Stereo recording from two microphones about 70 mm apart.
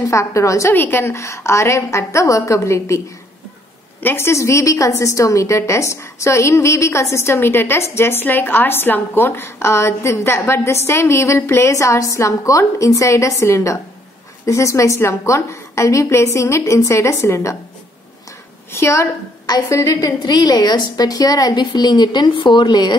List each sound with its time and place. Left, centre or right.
0.1 s a woman's voice: left
0.7 s a woman's voice: left
4.0 s a woman's voice: left
18.7 s a woman's voice: left
19.7 s a woman's voice: left